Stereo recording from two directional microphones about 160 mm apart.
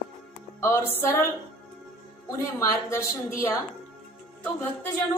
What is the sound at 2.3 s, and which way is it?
A woman's voice, 20° left (ahead or behind).